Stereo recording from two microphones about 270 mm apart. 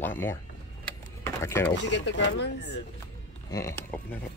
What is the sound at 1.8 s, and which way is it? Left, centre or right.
Speech, left.